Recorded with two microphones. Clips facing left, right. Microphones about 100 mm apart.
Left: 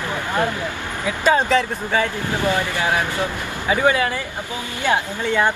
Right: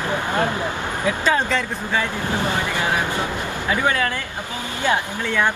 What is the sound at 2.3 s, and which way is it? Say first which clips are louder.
Speech: left 3 dB; 20° right (ahead or behind).